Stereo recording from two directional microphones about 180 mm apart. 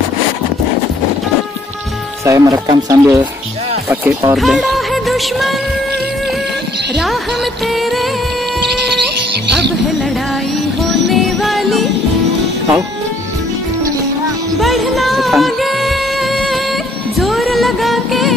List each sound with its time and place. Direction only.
2.2 s speech: 15° right (ahead or behind)
4.4 s music: centre (ahead or behind)
7.6 s music: centre (ahead or behind)
10.8 s music: centre (ahead or behind)
14.6 s music: centre (ahead or behind)